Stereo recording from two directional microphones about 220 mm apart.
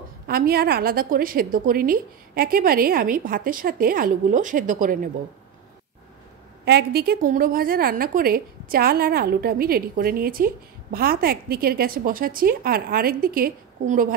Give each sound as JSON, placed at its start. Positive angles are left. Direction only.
{"t": 0.3, "sound": "a woman's voice", "side_deg": -45}
{"t": 6.6, "sound": "a woman's voice", "side_deg": -45}